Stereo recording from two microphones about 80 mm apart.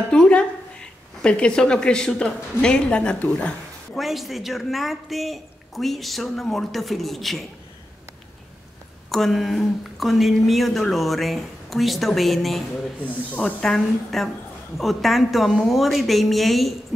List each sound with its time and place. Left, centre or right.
0.1 s a woman's voice: centre
3.9 s a woman's voice: centre
9.1 s a woman's voice: centre
13.0 s speech: centre
13.6 s a woman's voice: centre